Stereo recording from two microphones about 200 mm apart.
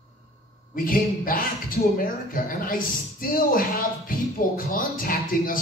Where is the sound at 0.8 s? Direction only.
45° left (ahead or behind).